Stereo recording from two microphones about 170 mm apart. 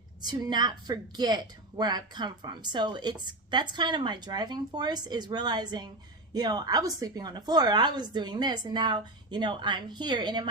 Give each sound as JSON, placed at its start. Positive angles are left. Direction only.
{"t": 0.2, "sound": "a woman's voice", "side_deg": -25}